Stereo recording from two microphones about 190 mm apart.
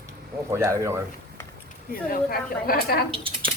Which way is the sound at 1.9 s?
50° left (ahead or behind).